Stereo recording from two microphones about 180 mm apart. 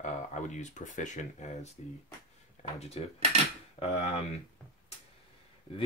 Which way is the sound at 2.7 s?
35° left (ahead or behind).